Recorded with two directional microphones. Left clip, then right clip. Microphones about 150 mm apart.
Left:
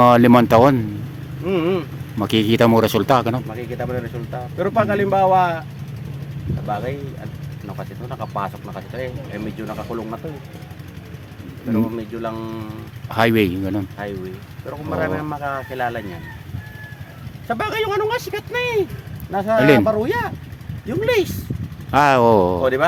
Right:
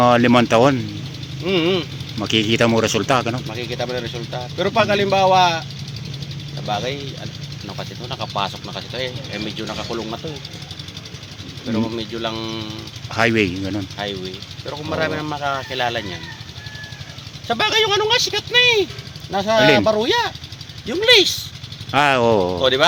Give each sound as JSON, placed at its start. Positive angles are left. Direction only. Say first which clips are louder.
{"t": 0.0, "sound": "speech", "louder": "left 2 dB", "side_deg": 40}
{"t": 1.5, "sound": "speech", "louder": "right 1 dB", "side_deg": -15}
{"t": 2.1, "sound": "speech", "louder": "even", "side_deg": 40}
{"t": 3.5, "sound": "speech", "louder": "right 2 dB", "side_deg": -15}
{"t": 6.7, "sound": "speech", "louder": "right 2 dB", "side_deg": -15}
{"t": 11.7, "sound": "speech", "louder": "left 1 dB", "side_deg": -15}
{"t": 13.1, "sound": "speech", "louder": "left 1 dB", "side_deg": 30}
{"t": 14.7, "sound": "speech", "louder": "right 1 dB", "side_deg": -15}
{"t": 17.5, "sound": "speech", "louder": "right 4 dB", "side_deg": -15}
{"t": 19.5, "sound": "speech", "louder": "even", "side_deg": 40}
{"t": 19.8, "sound": "speech", "louder": "right 2 dB", "side_deg": -15}
{"t": 21.9, "sound": "speech", "louder": "left 2 dB", "side_deg": 40}